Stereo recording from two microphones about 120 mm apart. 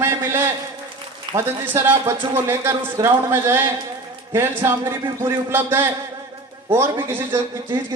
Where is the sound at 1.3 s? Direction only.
40° right (ahead or behind).